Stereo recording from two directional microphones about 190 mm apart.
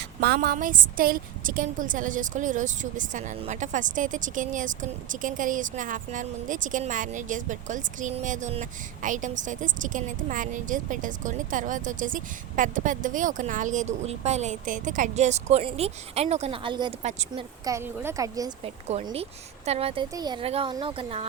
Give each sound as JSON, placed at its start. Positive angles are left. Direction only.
{"t": 0.2, "sound": "a woman's voice", "side_deg": -55}
{"t": 17.0, "sound": "speech", "side_deg": -35}
{"t": 17.7, "sound": "a woman's voice", "side_deg": -15}
{"t": 18.6, "sound": "a woman's voice", "side_deg": -30}